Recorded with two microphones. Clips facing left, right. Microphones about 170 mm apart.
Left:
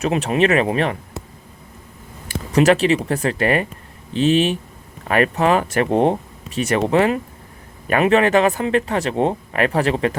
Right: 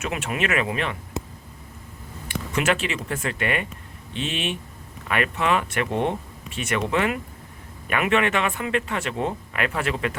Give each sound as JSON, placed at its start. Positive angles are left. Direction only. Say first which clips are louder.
{"t": 0.0, "sound": "speech", "louder": "left 9 dB", "side_deg": 35}
{"t": 2.2, "sound": "speech", "louder": "left 9 dB", "side_deg": 35}